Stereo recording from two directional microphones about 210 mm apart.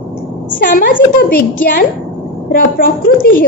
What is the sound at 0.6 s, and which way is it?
A woman's voice, 40° left (ahead or behind).